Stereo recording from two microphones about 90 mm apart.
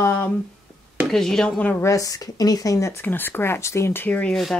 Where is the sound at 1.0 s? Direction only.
5° left (ahead or behind).